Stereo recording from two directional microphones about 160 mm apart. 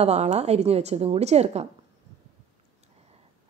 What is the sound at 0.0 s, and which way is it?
Speech, 40° right (ahead or behind).